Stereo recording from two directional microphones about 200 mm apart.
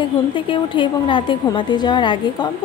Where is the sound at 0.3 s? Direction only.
25° left (ahead or behind).